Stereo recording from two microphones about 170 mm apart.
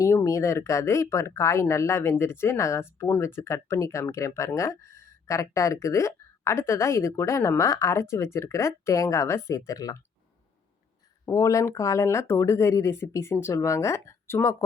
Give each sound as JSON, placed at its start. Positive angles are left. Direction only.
{"t": 0.0, "sound": "speech", "side_deg": 15}
{"t": 11.3, "sound": "speech", "side_deg": 20}